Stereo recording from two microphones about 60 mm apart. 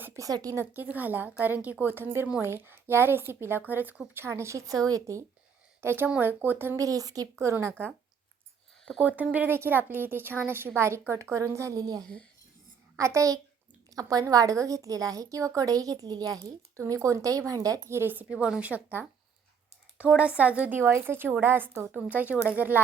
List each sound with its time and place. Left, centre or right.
0.2 s speech: right
0.7 s a woman's voice: right
4.1 s a woman's voice: right
5.8 s a woman's voice: right
6.7 s speech: right
7.3 s speech: right
9.0 s a woman's voice: right
9.5 s a woman's voice: right
13.0 s a woman's voice: right
13.9 s a woman's voice: right
16.8 s speech: right
17.8 s speech: right
18.1 s a woman's voice: right
20.7 s a woman's voice: right